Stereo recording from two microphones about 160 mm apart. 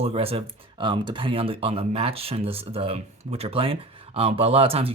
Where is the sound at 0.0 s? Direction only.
40° right (ahead or behind).